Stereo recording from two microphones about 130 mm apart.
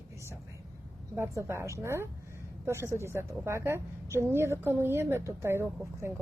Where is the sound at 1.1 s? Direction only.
20° right (ahead or behind).